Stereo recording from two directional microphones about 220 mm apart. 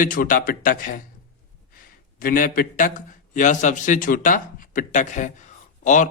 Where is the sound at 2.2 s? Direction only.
40° left (ahead or behind).